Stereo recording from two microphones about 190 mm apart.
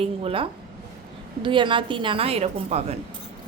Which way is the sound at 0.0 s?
30° right (ahead or behind).